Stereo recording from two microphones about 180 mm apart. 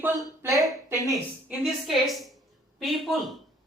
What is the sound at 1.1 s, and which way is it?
A woman's voice, centre (ahead or behind).